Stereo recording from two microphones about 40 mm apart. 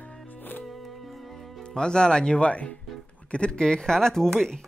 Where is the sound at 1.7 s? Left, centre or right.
Left.